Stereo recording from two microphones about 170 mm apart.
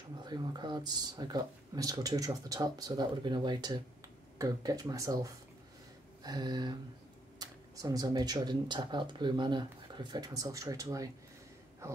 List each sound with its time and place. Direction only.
0.2 s speech: 25° right (ahead or behind)